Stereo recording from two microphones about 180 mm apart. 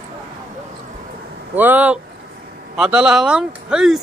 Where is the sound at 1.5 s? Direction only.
10° right (ahead or behind).